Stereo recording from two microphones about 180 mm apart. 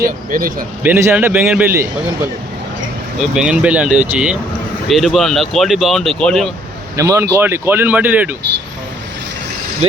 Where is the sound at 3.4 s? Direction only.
5° right (ahead or behind).